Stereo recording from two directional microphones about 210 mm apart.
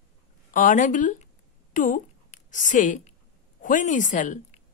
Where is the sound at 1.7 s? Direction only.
40° left (ahead or behind).